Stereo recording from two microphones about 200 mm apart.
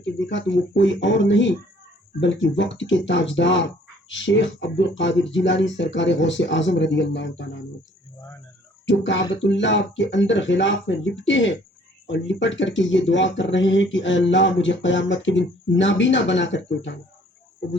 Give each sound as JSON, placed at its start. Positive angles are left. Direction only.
{"t": 0.0, "sound": "speech", "side_deg": 65}
{"t": 8.9, "sound": "speech", "side_deg": 65}